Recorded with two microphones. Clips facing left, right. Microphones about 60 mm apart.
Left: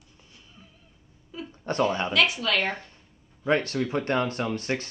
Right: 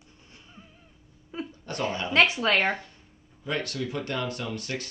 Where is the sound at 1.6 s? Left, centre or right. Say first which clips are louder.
Left 6 dB; left.